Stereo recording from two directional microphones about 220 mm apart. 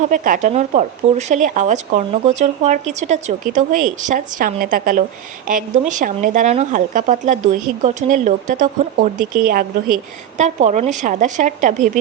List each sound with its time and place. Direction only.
0.1 s speech: 35° right (ahead or behind)